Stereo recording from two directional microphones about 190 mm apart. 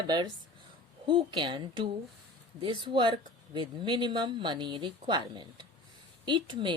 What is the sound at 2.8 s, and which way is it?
Speech, 25° right (ahead or behind).